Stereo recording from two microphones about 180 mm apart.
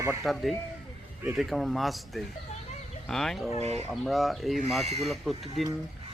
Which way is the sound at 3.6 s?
40° right (ahead or behind).